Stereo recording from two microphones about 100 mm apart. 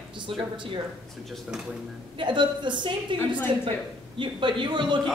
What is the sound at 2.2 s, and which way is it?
Speech, 50° right (ahead or behind).